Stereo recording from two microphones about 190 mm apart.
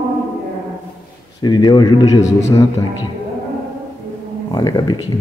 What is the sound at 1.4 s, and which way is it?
Speech, 20° left (ahead or behind).